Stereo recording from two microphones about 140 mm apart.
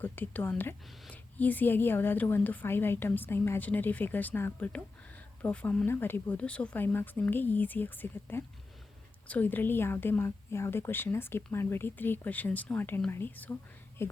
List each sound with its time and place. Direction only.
0.0 s a woman's voice: 15° left (ahead or behind)